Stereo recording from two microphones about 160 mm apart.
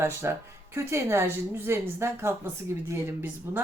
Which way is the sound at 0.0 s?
15° right (ahead or behind).